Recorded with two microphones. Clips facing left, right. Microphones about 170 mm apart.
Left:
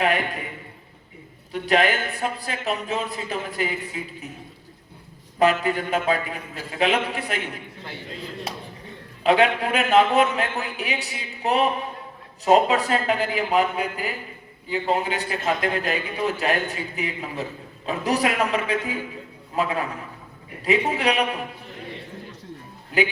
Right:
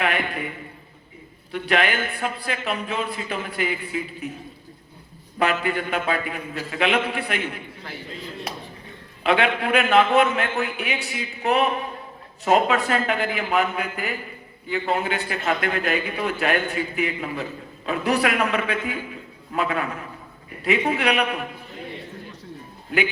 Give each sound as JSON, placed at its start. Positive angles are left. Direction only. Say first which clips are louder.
{"t": 0.0, "sound": "a man's voice", "louder": "left 2 dB", "side_deg": 40}
{"t": 1.5, "sound": "a man's voice", "louder": "left 2 dB", "side_deg": 40}
{"t": 5.4, "sound": "a man's voice", "louder": "left 3 dB", "side_deg": 40}
{"t": 9.2, "sound": "a man's voice", "louder": "left 2 dB", "side_deg": 40}